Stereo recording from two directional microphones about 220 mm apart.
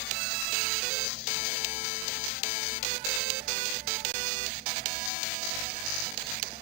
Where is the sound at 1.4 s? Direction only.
45° left (ahead or behind).